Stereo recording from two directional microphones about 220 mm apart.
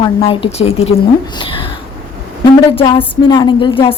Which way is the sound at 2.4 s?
20° left (ahead or behind).